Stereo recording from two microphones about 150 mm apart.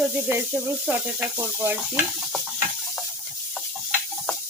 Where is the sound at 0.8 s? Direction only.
10° right (ahead or behind).